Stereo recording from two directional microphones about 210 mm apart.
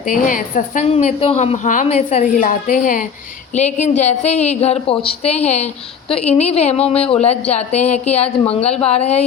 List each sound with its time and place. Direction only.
0.0 s a woman's voice: 40° left (ahead or behind)